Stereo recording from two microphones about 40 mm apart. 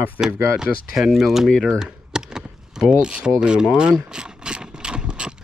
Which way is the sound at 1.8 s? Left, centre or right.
Centre.